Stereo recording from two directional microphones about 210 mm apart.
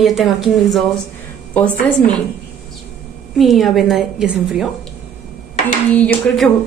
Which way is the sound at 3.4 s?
Centre (ahead or behind).